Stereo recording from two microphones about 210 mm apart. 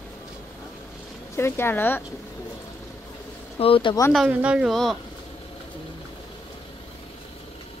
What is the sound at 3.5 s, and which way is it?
Speech, 25° left (ahead or behind).